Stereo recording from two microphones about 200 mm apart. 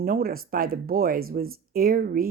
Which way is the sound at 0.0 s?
45° right (ahead or behind).